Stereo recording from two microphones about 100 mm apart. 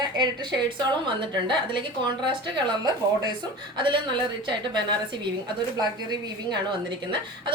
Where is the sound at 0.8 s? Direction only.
50° right (ahead or behind).